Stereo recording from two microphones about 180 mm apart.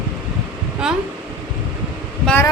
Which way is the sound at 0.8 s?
5° right (ahead or behind).